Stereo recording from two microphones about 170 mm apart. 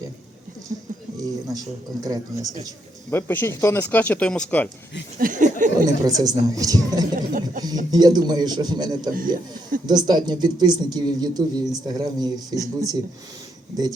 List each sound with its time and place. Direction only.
0.7 s a sound: 55° right (ahead or behind)
1.1 s speech: 20° right (ahead or behind)
3.1 s speech: 15° left (ahead or behind)
5.2 s speech: 50° right (ahead or behind)
5.8 s speech: 20° right (ahead or behind)
7.2 s a sound: 50° right (ahead or behind)
7.9 s speech: 25° right (ahead or behind)
9.1 s speech: 55° right (ahead or behind)
9.8 s speech: 25° right (ahead or behind)